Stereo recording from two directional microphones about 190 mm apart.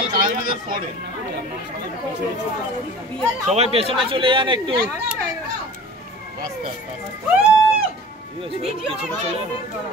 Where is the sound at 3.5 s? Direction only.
35° right (ahead or behind).